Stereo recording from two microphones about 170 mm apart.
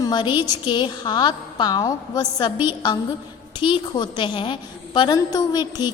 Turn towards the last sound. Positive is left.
turn(degrees=25)  # may be behind; listen again after turning